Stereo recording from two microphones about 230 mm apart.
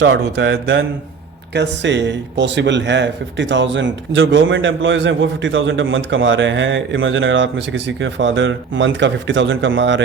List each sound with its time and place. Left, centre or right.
0.0 s speech: right